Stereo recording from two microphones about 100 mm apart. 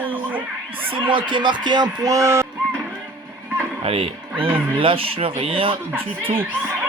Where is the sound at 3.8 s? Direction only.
75° right (ahead or behind).